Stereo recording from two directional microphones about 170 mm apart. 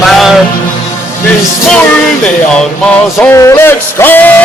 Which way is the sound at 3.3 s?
15° left (ahead or behind).